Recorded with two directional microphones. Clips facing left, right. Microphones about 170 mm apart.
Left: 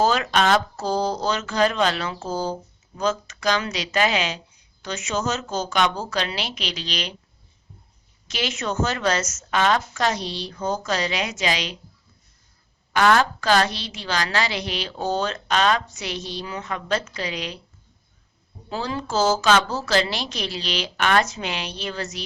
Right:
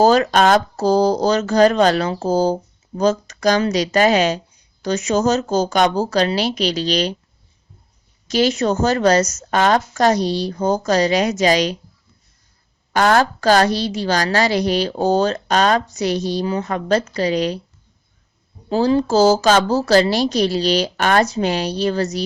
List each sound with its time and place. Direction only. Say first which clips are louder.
0.0 s a woman's voice: right 7 dB; 40° right (ahead or behind)
8.3 s a woman's voice: right 11 dB; 40° right (ahead or behind)
12.9 s a woman's voice: right 3 dB; 40° right (ahead or behind)
18.7 s a woman's voice: right 11 dB; 35° right (ahead or behind)